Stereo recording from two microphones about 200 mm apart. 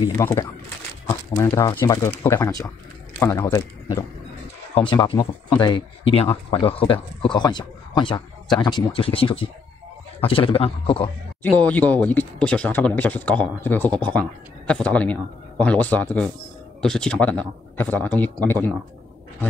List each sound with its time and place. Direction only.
0.2 s speech: 15° left (ahead or behind)
4.7 s speech: 25° left (ahead or behind)
11.4 s speech: 5° left (ahead or behind)